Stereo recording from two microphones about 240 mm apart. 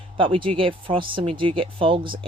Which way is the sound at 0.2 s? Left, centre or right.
Right.